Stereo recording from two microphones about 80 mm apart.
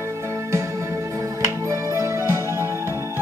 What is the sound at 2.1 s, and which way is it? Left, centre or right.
Music, right.